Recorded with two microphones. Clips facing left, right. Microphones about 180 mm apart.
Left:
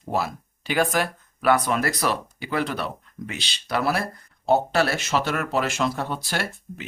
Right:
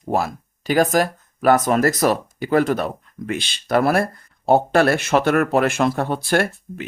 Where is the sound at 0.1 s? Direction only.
45° right (ahead or behind).